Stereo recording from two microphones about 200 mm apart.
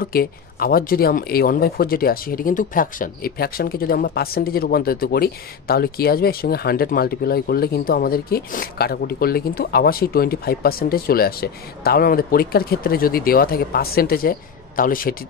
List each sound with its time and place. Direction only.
0.0 s speech: 50° left (ahead or behind)